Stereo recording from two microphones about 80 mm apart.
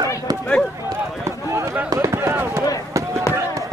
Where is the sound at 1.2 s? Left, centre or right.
Right.